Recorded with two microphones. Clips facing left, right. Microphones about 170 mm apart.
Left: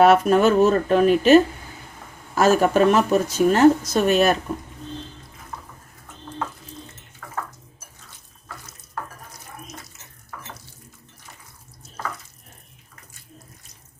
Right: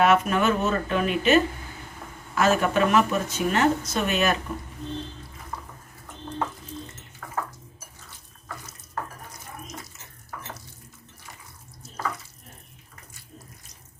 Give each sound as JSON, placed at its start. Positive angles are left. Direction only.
{"t": 0.0, "sound": "speech", "side_deg": 40}